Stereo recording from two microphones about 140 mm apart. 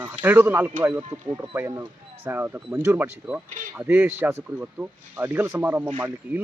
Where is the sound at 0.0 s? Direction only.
15° right (ahead or behind).